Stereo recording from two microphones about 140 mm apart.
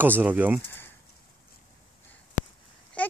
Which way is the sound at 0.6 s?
15° left (ahead or behind).